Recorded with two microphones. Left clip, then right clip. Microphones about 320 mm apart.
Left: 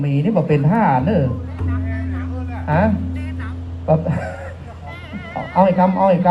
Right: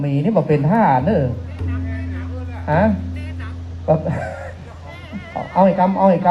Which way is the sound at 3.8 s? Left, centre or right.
Right.